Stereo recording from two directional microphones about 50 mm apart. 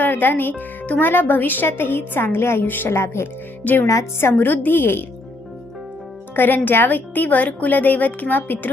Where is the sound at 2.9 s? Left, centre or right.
Left.